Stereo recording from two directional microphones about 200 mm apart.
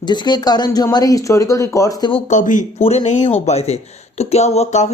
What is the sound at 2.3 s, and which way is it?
Speech, 40° left (ahead or behind).